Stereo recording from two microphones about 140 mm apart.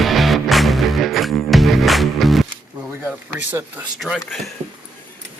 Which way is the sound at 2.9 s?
15° right (ahead or behind).